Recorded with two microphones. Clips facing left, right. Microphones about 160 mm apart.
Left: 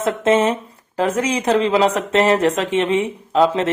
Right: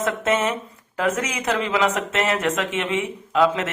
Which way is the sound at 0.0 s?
30° left (ahead or behind).